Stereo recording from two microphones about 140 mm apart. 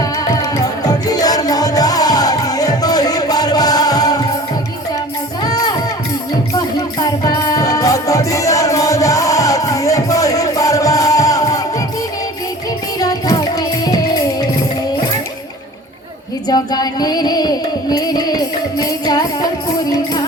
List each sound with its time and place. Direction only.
0.0 s music: 25° left (ahead or behind)
5.4 s music: 30° left (ahead or behind)
13.0 s music: 25° left (ahead or behind)
16.5 s music: 30° left (ahead or behind)